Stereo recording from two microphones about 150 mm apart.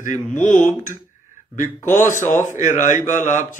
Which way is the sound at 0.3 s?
55° left (ahead or behind).